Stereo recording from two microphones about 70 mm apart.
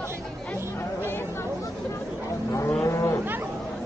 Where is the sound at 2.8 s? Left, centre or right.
Left.